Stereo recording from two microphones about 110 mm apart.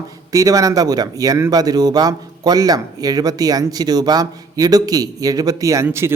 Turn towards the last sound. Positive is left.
turn(degrees=-25)  # may be behind; listen again after turning